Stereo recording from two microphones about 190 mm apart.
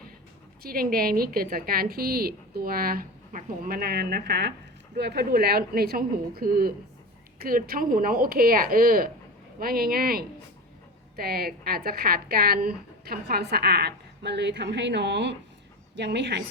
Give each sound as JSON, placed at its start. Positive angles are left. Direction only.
{"t": 0.6, "sound": "a woman's voice", "side_deg": -50}